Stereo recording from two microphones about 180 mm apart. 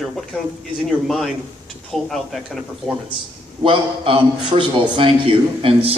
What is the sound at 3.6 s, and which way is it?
A man's voice, 30° right (ahead or behind).